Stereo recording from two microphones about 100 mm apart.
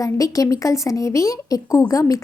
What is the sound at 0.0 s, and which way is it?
Speech, 35° left (ahead or behind).